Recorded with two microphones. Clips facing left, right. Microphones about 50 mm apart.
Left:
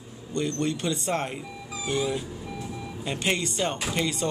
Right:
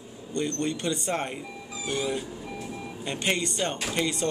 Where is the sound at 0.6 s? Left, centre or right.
Centre.